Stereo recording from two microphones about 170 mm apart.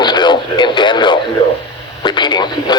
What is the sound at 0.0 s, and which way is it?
Radio, 25° left (ahead or behind).